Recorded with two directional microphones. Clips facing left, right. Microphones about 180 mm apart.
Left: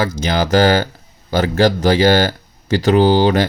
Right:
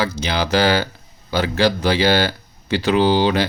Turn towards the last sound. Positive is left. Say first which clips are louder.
# left 4 dB
turn(degrees=45)  # may be behind; listen again after turning